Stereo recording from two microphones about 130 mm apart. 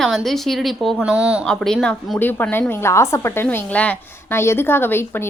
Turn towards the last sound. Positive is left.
turn(degrees=15)  # may be behind; listen again after turning